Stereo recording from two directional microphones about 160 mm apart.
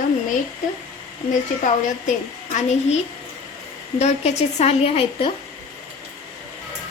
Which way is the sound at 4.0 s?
45° left (ahead or behind).